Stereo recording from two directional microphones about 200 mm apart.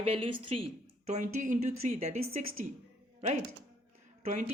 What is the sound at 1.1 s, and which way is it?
A woman's voice, 40° right (ahead or behind).